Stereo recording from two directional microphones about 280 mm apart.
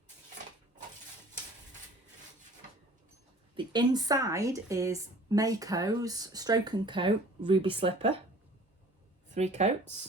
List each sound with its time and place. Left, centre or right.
3.5 s a woman's voice: centre
9.3 s speech: right